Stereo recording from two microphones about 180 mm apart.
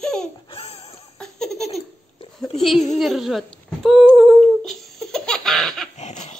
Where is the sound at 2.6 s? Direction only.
Centre (ahead or behind).